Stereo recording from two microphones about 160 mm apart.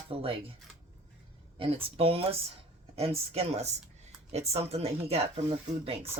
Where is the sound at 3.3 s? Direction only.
40° right (ahead or behind).